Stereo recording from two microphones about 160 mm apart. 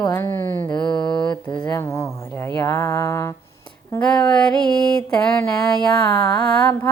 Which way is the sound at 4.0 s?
5° left (ahead or behind).